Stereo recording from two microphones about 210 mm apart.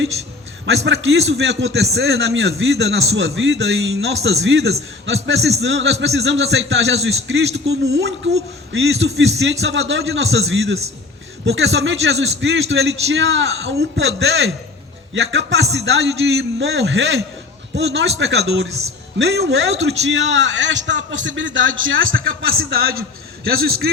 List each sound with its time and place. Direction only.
1.3 s a man's voice: 55° right (ahead or behind)
22.3 s a man's voice: 45° right (ahead or behind)